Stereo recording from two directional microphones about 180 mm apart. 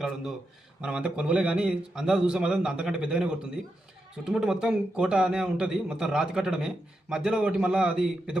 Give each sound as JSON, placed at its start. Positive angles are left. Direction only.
{"t": 0.8, "sound": "a man's voice", "side_deg": -5}